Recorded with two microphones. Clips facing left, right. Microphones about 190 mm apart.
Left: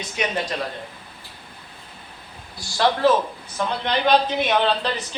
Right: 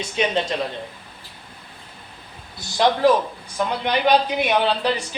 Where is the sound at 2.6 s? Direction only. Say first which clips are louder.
Right 2 dB; 20° right (ahead or behind).